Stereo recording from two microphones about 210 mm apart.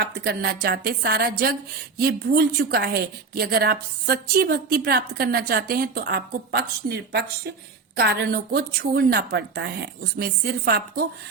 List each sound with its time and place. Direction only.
0.0 s a woman's voice: 45° right (ahead or behind)